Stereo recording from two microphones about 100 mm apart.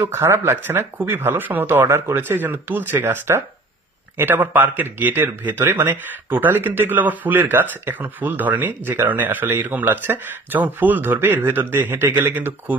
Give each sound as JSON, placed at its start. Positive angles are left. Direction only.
{"t": 0.0, "sound": "a man's voice", "side_deg": -25}